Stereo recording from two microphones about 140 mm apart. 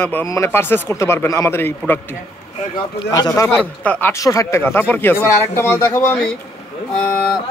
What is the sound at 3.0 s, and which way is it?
Speech, 25° left (ahead or behind).